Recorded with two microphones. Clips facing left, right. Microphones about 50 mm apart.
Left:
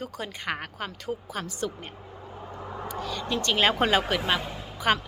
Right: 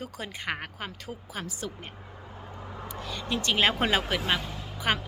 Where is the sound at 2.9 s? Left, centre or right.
Centre.